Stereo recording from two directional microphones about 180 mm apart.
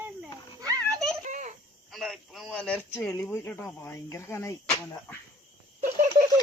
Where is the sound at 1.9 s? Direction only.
Centre (ahead or behind).